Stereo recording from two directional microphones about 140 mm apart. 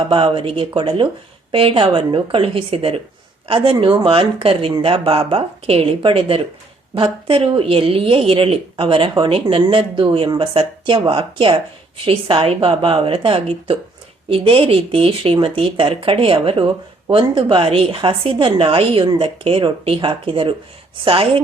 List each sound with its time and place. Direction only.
0.0 s speech: 40° right (ahead or behind)